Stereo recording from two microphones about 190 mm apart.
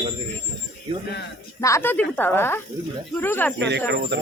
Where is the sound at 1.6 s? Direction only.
15° left (ahead or behind).